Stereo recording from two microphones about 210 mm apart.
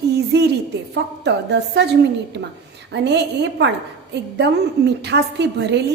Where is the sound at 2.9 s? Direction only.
55° right (ahead or behind).